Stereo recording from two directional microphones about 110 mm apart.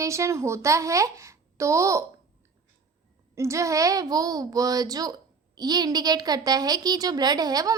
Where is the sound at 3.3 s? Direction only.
25° right (ahead or behind).